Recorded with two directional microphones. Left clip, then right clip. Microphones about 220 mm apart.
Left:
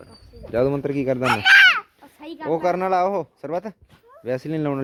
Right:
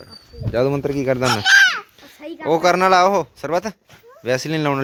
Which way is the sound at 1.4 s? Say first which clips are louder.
Left 1 dB; 15° left (ahead or behind).